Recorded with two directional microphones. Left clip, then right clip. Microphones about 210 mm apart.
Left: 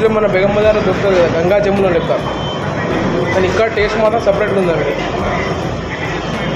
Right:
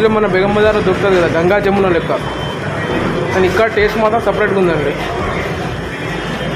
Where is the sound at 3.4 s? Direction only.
40° right (ahead or behind).